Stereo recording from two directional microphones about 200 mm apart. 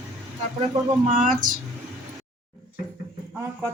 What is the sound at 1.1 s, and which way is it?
Speech, 40° right (ahead or behind).